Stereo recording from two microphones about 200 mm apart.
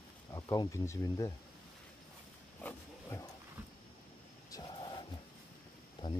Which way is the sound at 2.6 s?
10° left (ahead or behind).